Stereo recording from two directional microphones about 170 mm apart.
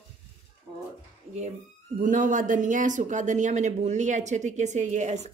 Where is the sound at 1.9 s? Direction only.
50° right (ahead or behind).